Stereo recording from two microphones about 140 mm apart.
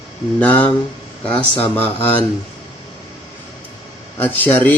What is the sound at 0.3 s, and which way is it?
Speech, 10° left (ahead or behind).